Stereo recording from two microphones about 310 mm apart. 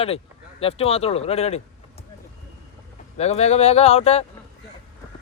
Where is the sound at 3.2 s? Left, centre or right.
Left.